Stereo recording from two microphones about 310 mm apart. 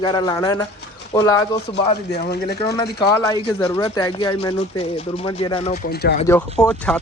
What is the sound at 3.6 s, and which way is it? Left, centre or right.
Speech, centre.